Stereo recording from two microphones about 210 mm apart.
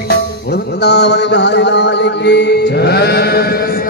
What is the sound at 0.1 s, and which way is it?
Music, 50° left (ahead or behind).